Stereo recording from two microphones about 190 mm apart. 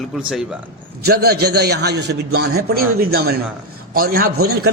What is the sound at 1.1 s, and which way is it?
A man's voice, 55° right (ahead or behind).